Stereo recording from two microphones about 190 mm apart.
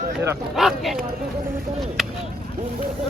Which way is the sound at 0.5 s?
Centre (ahead or behind).